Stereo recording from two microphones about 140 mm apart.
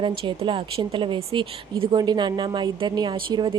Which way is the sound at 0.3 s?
35° right (ahead or behind).